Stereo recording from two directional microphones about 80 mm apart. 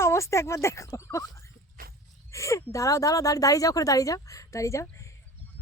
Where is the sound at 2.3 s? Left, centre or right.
Left.